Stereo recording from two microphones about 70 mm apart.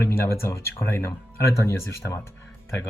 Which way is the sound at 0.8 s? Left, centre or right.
Left.